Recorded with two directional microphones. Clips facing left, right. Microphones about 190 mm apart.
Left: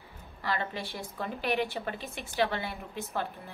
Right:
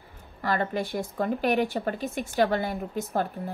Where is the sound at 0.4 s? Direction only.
45° right (ahead or behind).